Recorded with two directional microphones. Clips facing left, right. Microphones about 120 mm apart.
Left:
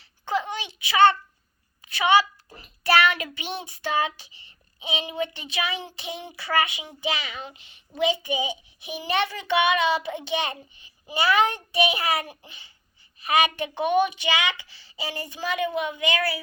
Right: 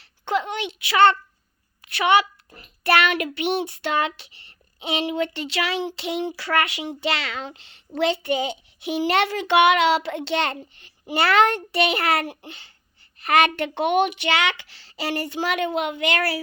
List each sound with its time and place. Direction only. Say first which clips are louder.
0.0 s a sound: right 3 dB; 65° right (ahead or behind)
1.8 s a woman's voice: right 1 dB; 65° right (ahead or behind)
2.8 s child singing: right 1 dB; 55° right (ahead or behind)